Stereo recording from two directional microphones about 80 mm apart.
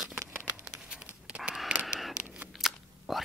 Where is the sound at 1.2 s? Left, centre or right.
Centre.